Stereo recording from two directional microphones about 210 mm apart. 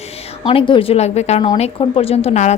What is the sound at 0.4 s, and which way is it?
Speech, 25° left (ahead or behind).